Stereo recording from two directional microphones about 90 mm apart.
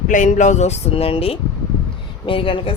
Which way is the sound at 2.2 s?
75° left (ahead or behind).